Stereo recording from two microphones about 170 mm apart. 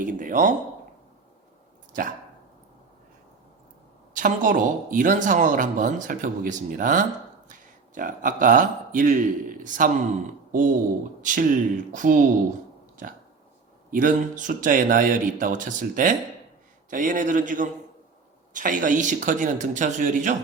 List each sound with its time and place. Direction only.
0.0 s speech: 50° right (ahead or behind)
4.1 s speech: 50° right (ahead or behind)
13.9 s speech: 50° right (ahead or behind)